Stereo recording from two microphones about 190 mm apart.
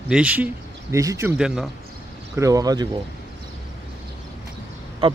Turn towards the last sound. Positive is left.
turn(degrees=-30)  # may be behind; listen again after turning